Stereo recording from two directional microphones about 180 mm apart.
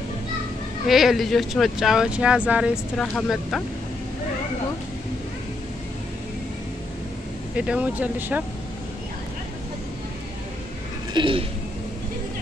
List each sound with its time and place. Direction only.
0.8 s speech: centre (ahead or behind)
7.5 s speech: 5° right (ahead or behind)
11.1 s speech: 30° right (ahead or behind)